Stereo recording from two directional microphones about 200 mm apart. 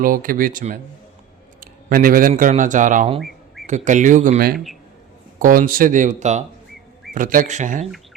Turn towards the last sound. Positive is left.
turn(degrees=-40)  # may be behind; listen again after turning